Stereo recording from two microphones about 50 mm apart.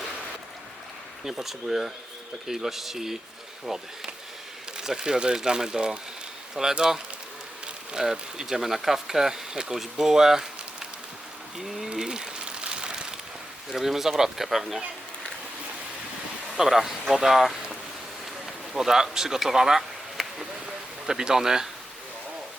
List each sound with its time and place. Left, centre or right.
1.2 s speech: centre
11.5 s speech: centre
11.9 s a sound: centre
13.7 s speech: centre
16.6 s speech: centre
18.4 s a sound: centre
21.1 s speech: centre